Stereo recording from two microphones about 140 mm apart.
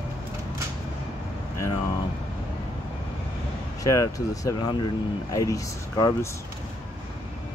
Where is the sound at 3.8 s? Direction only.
25° left (ahead or behind).